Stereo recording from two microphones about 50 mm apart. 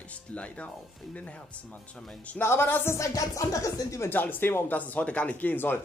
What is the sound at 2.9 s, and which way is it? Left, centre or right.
Music, left.